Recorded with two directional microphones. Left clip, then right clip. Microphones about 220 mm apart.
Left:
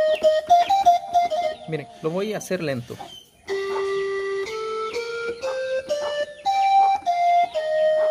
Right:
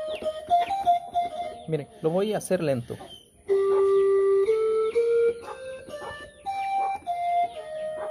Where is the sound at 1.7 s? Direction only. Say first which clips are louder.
Even; 5° right (ahead or behind).